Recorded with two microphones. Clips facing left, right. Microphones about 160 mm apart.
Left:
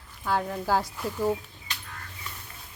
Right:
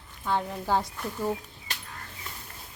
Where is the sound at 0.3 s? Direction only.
5° left (ahead or behind).